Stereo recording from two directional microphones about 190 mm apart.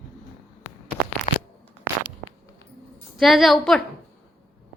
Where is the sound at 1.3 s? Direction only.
35° left (ahead or behind).